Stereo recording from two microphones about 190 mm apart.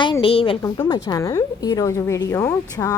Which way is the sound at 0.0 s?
25° left (ahead or behind).